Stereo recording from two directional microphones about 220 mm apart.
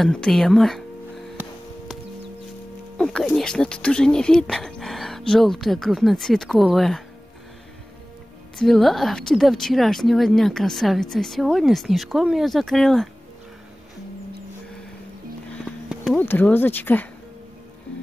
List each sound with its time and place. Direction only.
0.0 s music: centre (ahead or behind)
3.0 s speech: 5° left (ahead or behind)
8.5 s speech: centre (ahead or behind)
15.6 s a sound: centre (ahead or behind)
16.3 s speech: 10° left (ahead or behind)